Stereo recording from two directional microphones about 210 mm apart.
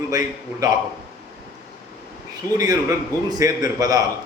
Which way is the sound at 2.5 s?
15° right (ahead or behind).